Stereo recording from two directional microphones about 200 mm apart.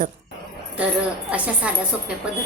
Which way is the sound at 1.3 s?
5° right (ahead or behind).